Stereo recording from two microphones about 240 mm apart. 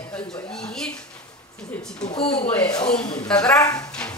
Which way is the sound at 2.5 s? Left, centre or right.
Centre.